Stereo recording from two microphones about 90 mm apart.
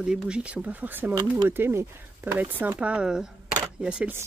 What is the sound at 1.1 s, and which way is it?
Speech, 45° right (ahead or behind).